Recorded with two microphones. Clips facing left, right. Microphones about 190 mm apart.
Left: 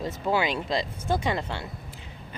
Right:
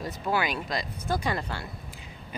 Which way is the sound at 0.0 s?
25° left (ahead or behind).